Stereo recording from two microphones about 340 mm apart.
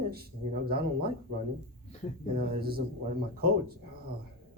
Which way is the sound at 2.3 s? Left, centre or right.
Right.